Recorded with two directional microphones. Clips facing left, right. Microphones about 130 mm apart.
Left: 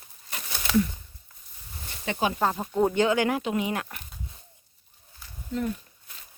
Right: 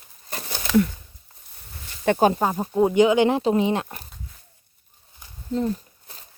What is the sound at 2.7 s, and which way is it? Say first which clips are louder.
Speech: right 7 dB; 15° right (ahead or behind).